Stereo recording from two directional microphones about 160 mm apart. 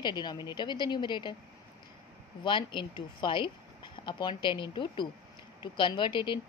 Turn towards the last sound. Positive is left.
turn(degrees=30)  # may be behind; listen again after turning